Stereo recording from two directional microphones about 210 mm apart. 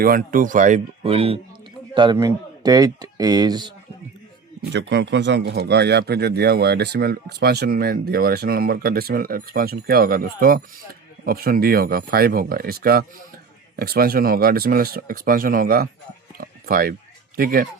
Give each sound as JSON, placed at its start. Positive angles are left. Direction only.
{"t": 0.0, "sound": "speech", "side_deg": -45}
{"t": 2.1, "sound": "speech", "side_deg": -15}
{"t": 4.7, "sound": "speech", "side_deg": -55}
{"t": 16.4, "sound": "a sound", "side_deg": -45}
{"t": 17.3, "sound": "speech", "side_deg": -45}